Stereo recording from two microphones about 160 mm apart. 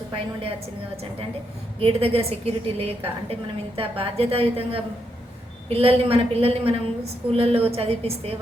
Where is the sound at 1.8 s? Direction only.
35° right (ahead or behind).